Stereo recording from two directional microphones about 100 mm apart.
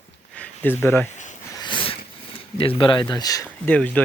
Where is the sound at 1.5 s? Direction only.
50° left (ahead or behind).